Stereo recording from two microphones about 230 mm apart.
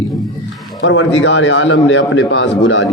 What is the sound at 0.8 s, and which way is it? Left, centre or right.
A man's voice, left.